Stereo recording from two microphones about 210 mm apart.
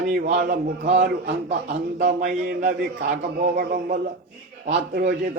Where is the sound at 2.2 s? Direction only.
35° right (ahead or behind).